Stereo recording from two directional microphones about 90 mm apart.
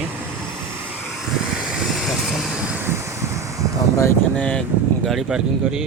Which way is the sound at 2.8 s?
30° right (ahead or behind).